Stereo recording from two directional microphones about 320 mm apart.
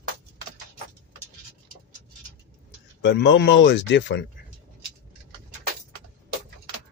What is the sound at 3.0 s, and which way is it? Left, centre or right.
Speech, left.